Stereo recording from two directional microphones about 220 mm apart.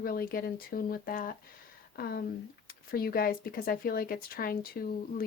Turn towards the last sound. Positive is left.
turn(degrees=40)  # may be behind; listen again after turning